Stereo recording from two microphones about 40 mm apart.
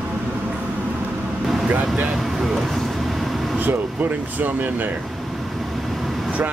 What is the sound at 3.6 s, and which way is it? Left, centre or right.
Speech, right.